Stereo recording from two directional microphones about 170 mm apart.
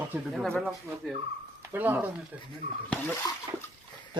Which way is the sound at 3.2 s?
20° left (ahead or behind).